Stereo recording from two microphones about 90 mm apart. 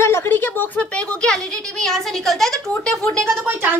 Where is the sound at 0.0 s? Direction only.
25° left (ahead or behind); by 3.3 s 5° left (ahead or behind).